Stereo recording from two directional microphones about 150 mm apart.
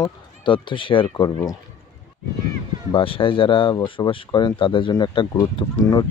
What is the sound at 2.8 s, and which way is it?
Speech, 35° left (ahead or behind).